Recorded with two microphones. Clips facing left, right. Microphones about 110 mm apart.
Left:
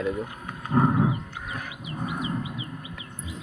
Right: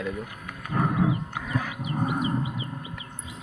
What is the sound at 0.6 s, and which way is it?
Wild animals, 25° left (ahead or behind).